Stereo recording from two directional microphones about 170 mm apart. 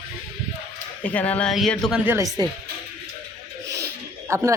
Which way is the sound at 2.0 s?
10° right (ahead or behind).